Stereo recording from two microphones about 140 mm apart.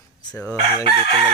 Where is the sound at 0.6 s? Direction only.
45° right (ahead or behind).